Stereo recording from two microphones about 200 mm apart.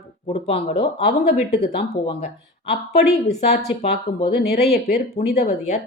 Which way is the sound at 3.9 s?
55° left (ahead or behind).